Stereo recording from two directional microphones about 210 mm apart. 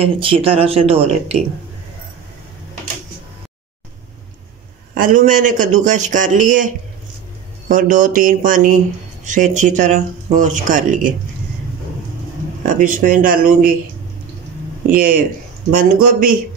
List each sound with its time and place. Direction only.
0.0 s speech: 25° right (ahead or behind)
4.9 s speech: 40° right (ahead or behind)
12.6 s speech: 40° right (ahead or behind)
14.9 s speech: 40° right (ahead or behind)